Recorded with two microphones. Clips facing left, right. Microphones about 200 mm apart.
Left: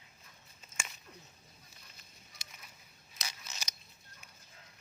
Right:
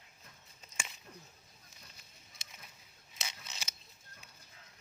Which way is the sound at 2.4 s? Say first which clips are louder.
Even; 25° right (ahead or behind).